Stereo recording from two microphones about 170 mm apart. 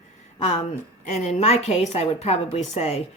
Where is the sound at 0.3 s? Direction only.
40° left (ahead or behind).